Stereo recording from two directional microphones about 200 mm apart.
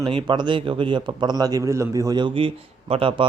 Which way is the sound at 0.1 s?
25° right (ahead or behind).